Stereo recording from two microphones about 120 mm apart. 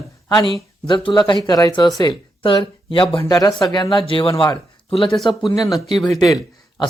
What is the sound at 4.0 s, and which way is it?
Speech, 45° left (ahead or behind).